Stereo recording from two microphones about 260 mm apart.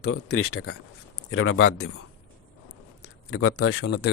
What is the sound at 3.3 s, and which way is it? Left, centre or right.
Speech, left.